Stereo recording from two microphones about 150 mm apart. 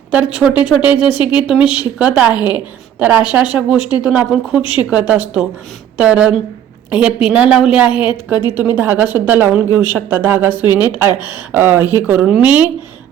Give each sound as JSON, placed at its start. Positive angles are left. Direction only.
{"t": 0.1, "sound": "speech", "side_deg": -5}
{"t": 1.2, "sound": "a woman's voice", "side_deg": 30}
{"t": 1.5, "sound": "speech", "side_deg": -5}
{"t": 2.3, "sound": "a woman's voice", "side_deg": 30}
{"t": 3.0, "sound": "speech", "side_deg": -10}
{"t": 4.6, "sound": "a woman's voice", "side_deg": 35}
{"t": 4.9, "sound": "speech", "side_deg": -10}
{"t": 8.0, "sound": "a woman's voice", "side_deg": 30}
{"t": 8.5, "sound": "speech", "side_deg": -15}